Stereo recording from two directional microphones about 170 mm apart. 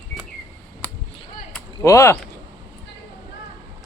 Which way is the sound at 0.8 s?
10° left (ahead or behind).